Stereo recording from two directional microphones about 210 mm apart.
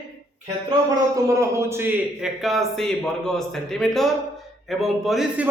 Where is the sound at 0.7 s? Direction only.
15° right (ahead or behind).